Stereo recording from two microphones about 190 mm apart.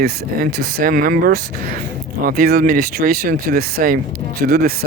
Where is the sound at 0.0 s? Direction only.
50° right (ahead or behind).